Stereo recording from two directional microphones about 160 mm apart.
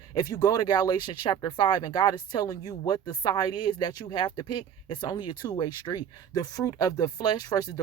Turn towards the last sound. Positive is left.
turn(degrees=25)  # may be behind; listen again after turning